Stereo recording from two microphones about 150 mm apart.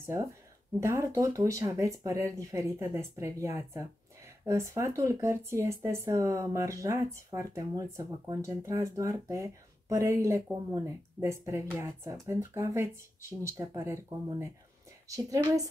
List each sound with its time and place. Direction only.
0.0 s speech: 20° right (ahead or behind)
15.0 s speech: 20° right (ahead or behind)